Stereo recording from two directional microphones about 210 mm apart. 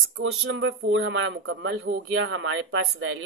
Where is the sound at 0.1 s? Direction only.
60° right (ahead or behind).